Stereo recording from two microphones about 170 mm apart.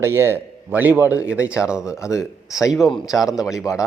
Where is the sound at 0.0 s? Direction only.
15° right (ahead or behind).